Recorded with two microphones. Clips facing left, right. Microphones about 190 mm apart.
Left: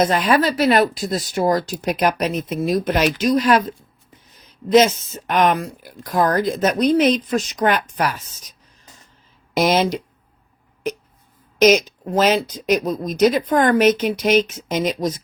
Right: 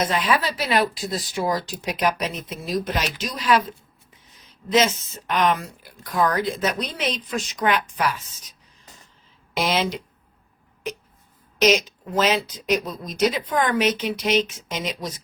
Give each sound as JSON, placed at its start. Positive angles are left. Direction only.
{"t": 0.0, "sound": "speech", "side_deg": 45}
{"t": 4.7, "sound": "speech", "side_deg": 45}
{"t": 9.6, "sound": "speech", "side_deg": 45}
{"t": 11.6, "sound": "speech", "side_deg": 45}